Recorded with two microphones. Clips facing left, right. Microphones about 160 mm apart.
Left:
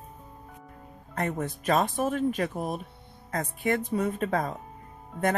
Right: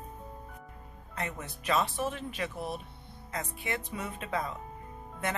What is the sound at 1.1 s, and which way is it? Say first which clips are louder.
Speech: left 8 dB; 50° left (ahead or behind).